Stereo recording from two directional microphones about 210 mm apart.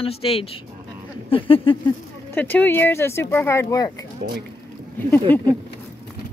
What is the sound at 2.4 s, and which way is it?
Speech, 10° left (ahead or behind).